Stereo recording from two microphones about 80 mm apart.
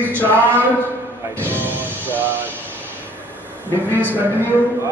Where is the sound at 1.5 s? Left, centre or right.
Right.